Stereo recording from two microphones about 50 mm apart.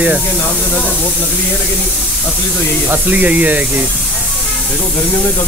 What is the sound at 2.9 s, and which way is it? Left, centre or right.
Speech, right.